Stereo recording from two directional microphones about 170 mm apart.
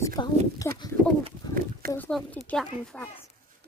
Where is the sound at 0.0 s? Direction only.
20° left (ahead or behind).